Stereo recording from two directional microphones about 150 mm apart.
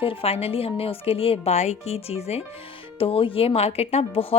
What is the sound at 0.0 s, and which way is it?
Speech, 40° left (ahead or behind).